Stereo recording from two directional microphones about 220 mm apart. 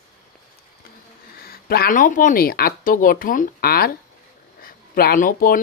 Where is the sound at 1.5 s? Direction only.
45° left (ahead or behind).